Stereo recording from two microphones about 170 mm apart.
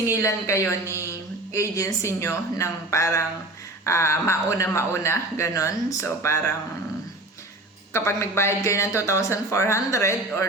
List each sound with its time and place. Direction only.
0.0 s speech: 20° left (ahead or behind)
7.9 s speech: 15° left (ahead or behind)